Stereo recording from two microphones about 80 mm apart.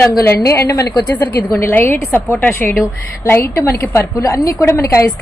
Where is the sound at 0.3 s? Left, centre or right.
Left.